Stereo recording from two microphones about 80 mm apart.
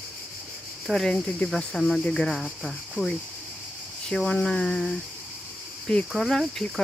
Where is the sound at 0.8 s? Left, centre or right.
Centre.